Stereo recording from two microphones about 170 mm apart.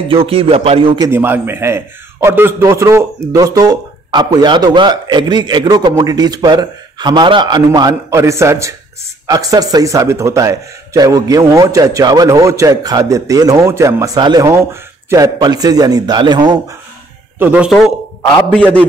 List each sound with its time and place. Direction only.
0.1 s speech: 35° right (ahead or behind)
1.1 s a man's voice: 10° right (ahead or behind)
17.4 s speech: 10° right (ahead or behind)